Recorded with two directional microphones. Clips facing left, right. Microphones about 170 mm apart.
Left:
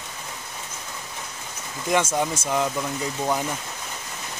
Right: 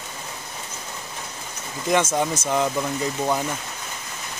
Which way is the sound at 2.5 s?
5° right (ahead or behind).